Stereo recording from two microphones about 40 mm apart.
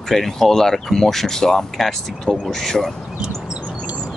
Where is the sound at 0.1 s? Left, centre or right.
Centre.